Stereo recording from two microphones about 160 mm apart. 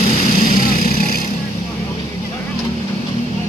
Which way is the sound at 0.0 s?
50° left (ahead or behind).